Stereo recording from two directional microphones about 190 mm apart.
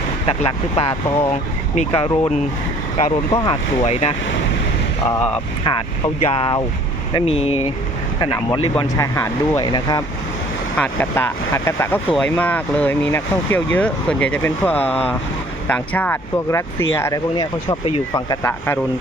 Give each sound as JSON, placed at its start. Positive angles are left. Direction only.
{"t": 0.3, "sound": "speech", "side_deg": 30}
{"t": 3.3, "sound": "speech", "side_deg": 25}
{"t": 5.0, "sound": "speech", "side_deg": 10}
{"t": 6.3, "sound": "speech", "side_deg": 25}
{"t": 10.8, "sound": "speech", "side_deg": 10}